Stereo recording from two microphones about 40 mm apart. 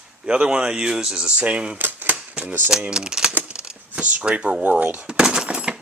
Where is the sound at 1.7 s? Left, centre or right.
Right.